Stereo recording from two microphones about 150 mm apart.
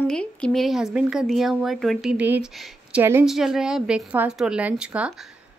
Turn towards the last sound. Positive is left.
turn(degrees=-5)  # may be behind; listen again after turning